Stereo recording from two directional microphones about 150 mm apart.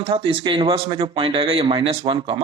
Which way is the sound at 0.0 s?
35° right (ahead or behind).